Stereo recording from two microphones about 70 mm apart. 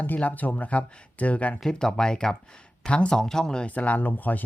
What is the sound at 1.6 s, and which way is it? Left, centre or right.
Speech, centre.